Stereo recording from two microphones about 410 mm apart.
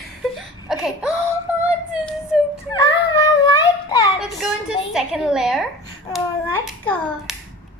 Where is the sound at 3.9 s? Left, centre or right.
Centre.